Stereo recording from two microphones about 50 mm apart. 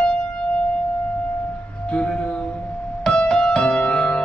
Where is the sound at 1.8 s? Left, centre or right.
Left.